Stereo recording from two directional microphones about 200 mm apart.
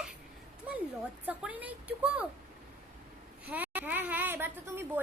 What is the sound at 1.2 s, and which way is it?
A woman's voice, 5° right (ahead or behind).